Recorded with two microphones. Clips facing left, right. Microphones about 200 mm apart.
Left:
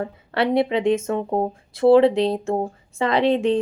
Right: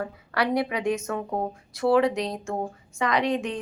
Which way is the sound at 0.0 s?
25° left (ahead or behind).